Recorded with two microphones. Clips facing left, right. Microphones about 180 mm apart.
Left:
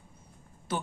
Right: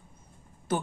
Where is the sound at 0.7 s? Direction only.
50° right (ahead or behind).